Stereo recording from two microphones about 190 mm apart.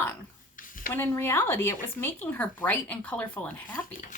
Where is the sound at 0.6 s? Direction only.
45° left (ahead or behind).